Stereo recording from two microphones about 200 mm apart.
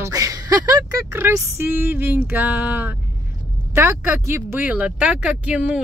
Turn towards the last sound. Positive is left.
turn(degrees=-5)  # may be behind; listen again after turning